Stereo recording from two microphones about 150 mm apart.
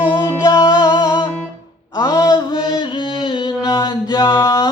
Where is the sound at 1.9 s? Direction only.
25° left (ahead or behind).